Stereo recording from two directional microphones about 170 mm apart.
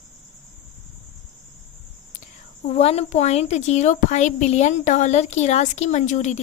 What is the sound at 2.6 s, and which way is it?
A woman's voice, 35° left (ahead or behind).